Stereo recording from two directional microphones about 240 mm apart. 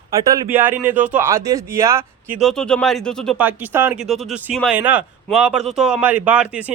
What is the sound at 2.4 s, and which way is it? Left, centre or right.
Speech, centre.